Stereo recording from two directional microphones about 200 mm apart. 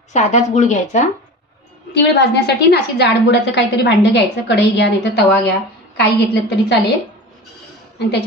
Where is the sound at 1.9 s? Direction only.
60° left (ahead or behind).